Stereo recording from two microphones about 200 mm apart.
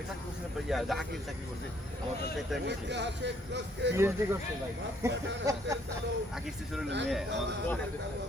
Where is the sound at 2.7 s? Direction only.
60° right (ahead or behind).